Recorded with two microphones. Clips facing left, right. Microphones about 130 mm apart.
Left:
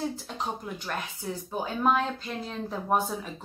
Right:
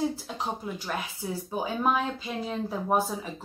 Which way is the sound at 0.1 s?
5° right (ahead or behind).